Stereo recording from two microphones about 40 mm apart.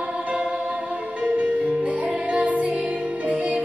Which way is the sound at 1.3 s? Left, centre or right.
Right.